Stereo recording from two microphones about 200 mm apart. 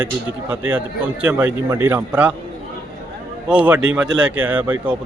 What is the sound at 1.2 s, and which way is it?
Speech, 5° right (ahead or behind).